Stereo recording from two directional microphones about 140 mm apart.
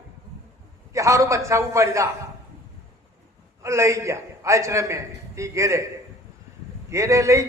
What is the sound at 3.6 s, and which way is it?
A man's voice, 20° right (ahead or behind).